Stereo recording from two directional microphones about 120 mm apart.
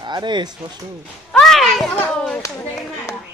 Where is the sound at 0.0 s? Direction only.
40° right (ahead or behind).